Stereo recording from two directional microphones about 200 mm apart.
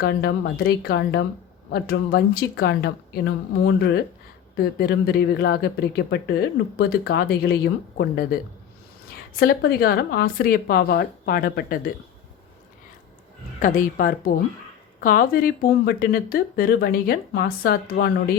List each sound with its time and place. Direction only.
0.0 s speech: 55° left (ahead or behind)
13.6 s speech: 40° left (ahead or behind)